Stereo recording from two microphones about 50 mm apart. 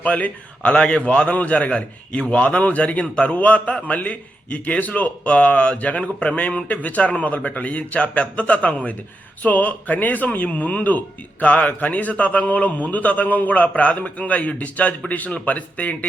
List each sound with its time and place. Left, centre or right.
0.0 s a man's voice: left
0.7 s a man's voice: centre